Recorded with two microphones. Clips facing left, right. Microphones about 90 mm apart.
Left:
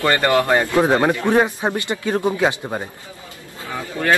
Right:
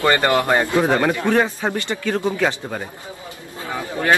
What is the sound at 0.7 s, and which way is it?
Speech, 20° left (ahead or behind).